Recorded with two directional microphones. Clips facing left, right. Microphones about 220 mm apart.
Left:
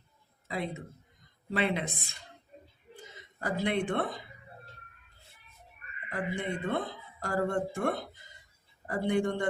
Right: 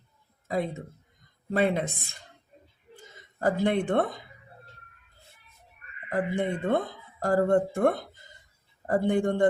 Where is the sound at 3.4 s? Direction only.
55° right (ahead or behind).